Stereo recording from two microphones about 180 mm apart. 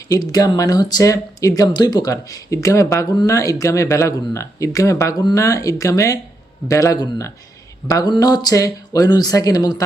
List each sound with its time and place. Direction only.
0.1 s speech: 20° left (ahead or behind)